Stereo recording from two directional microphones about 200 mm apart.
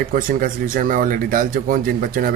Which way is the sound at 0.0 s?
45° right (ahead or behind).